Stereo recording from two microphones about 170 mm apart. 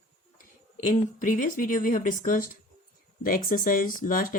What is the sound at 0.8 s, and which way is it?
Speech, 50° left (ahead or behind).